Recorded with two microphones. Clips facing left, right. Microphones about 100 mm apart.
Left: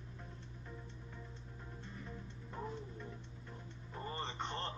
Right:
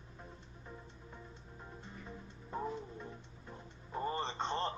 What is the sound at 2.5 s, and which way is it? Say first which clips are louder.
Music: right 5 dB; 20° right (ahead or behind).